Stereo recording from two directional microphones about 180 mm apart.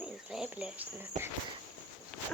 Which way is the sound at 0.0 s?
5° right (ahead or behind).